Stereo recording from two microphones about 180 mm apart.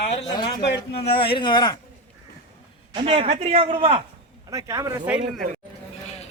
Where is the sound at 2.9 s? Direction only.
30° right (ahead or behind).